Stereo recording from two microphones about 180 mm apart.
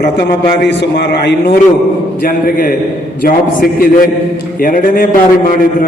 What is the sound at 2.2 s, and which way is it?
A man's voice, 55° left (ahead or behind).